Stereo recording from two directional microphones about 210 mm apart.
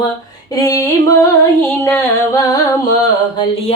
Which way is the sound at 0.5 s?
15° left (ahead or behind).